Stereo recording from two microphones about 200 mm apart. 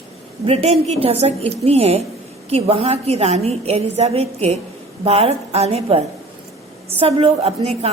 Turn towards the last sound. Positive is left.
turn(degrees=-30)  # may be behind; listen again after turning